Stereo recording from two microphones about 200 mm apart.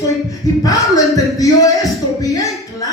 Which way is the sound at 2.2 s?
15° left (ahead or behind).